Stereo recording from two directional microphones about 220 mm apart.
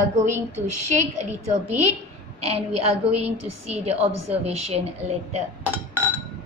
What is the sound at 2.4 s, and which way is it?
A woman's voice, 30° right (ahead or behind).